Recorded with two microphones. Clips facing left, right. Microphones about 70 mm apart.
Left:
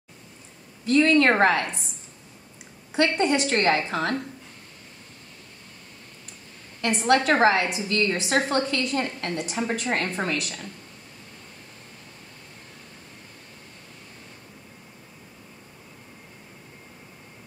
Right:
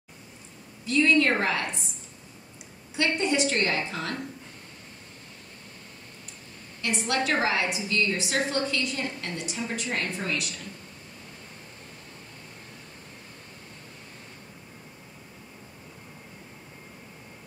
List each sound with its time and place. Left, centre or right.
0.8 s a woman's voice: left
3.0 s a woman's voice: left
6.8 s a woman's voice: left